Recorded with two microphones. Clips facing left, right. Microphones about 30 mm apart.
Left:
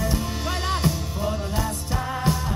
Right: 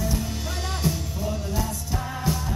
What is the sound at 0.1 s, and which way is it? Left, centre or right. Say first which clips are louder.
Music: left 3 dB; left.